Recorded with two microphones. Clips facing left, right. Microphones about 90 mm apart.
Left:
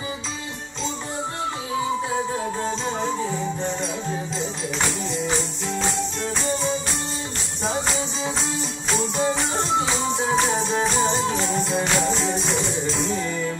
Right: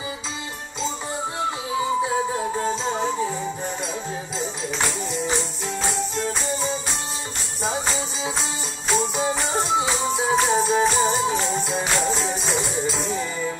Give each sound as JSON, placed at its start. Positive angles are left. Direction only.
{"t": 2.0, "sound": "music", "side_deg": -5}
{"t": 7.6, "sound": "music", "side_deg": -5}